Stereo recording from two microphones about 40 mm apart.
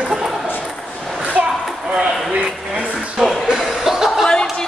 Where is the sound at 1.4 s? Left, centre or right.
Right.